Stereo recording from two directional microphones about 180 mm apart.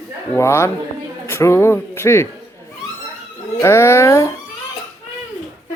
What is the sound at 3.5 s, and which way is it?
Speech, 15° left (ahead or behind).